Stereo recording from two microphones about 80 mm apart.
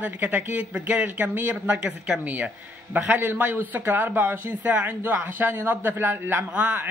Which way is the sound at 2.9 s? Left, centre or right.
Right.